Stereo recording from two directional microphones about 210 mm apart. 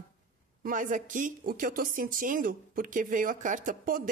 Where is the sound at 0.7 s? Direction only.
40° right (ahead or behind).